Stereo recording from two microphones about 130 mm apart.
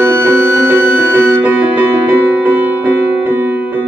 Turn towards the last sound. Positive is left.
turn(degrees=-15)  # may be behind; listen again after turning